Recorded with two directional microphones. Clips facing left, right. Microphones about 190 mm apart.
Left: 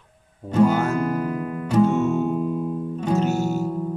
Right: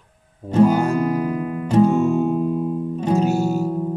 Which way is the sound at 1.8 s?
35° right (ahead or behind).